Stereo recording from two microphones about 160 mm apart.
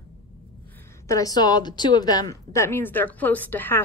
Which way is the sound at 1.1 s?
20° left (ahead or behind).